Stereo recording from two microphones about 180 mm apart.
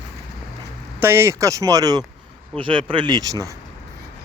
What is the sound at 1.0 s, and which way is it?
Speech, 15° right (ahead or behind).